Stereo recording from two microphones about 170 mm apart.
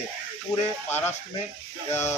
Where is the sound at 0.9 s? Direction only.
10° left (ahead or behind).